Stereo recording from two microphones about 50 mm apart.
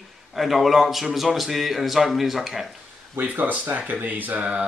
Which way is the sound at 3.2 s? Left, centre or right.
Right.